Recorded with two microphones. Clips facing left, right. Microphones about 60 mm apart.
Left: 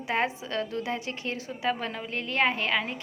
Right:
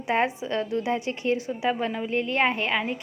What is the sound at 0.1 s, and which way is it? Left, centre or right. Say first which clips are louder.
A woman's voice: right 4 dB; right.